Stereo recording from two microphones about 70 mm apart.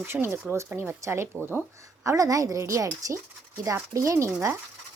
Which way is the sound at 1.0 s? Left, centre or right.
Right.